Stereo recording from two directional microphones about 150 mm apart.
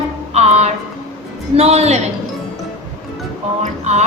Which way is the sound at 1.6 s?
45° right (ahead or behind).